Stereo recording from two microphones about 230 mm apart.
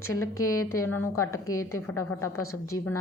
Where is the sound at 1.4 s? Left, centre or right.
Left.